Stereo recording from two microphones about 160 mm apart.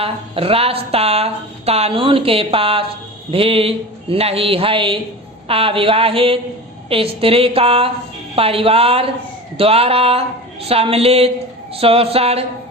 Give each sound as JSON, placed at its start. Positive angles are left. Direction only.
{"t": 0.0, "sound": "speech", "side_deg": -35}